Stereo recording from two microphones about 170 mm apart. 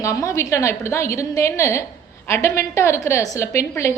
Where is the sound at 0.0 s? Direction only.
20° left (ahead or behind).